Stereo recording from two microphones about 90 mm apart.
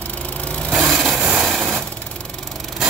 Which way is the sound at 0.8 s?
10° right (ahead or behind).